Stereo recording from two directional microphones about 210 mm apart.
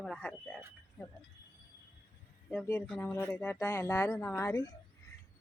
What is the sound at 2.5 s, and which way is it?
Speech, 10° left (ahead or behind).